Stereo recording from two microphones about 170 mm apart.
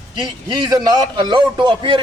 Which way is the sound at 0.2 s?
25° right (ahead or behind).